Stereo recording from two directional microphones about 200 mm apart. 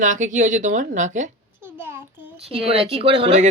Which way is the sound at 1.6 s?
10° right (ahead or behind).